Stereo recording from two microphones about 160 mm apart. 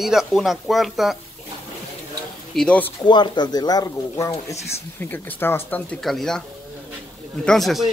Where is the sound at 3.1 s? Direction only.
30° left (ahead or behind); by 6.4 s centre (ahead or behind).